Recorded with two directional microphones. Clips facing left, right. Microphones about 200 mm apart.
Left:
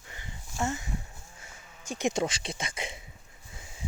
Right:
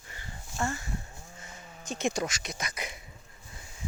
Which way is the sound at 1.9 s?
15° left (ahead or behind).